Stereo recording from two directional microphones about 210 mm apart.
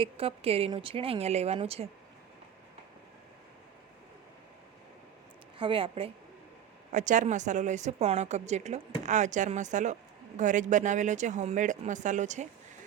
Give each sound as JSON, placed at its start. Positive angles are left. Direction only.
{"t": 0.0, "sound": "speech", "side_deg": -25}
{"t": 5.5, "sound": "speech", "side_deg": -25}
{"t": 6.9, "sound": "speech", "side_deg": -35}